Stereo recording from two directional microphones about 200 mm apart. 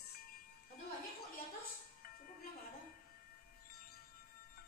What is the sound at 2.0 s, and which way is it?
Music, 45° left (ahead or behind).